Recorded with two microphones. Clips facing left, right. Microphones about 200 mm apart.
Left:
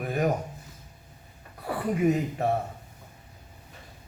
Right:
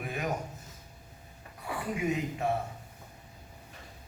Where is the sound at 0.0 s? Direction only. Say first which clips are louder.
Left 8 dB; 40° left (ahead or behind).